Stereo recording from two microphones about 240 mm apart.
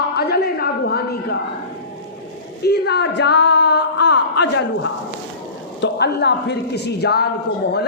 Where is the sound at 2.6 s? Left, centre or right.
Left.